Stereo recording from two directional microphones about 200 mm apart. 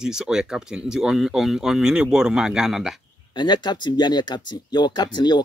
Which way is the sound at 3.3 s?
20° left (ahead or behind).